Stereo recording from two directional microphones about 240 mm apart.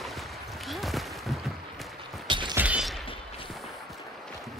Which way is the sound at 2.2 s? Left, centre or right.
Centre.